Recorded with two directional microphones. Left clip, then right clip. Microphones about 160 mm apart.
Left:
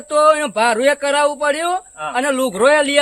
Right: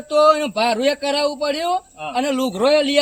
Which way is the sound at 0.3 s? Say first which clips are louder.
Left 3 dB; 15° left (ahead or behind).